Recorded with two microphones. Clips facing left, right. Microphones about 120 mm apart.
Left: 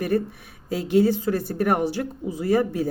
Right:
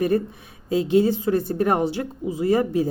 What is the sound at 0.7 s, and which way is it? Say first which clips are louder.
Speech: right 1 dB; 20° right (ahead or behind).